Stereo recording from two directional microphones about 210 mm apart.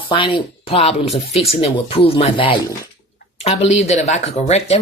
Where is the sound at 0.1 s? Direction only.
25° left (ahead or behind).